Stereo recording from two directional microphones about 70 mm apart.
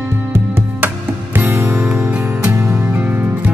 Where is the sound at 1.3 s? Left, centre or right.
Right.